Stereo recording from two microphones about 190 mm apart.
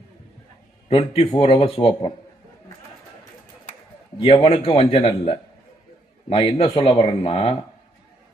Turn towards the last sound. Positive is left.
turn(degrees=30)  # may be behind; listen again after turning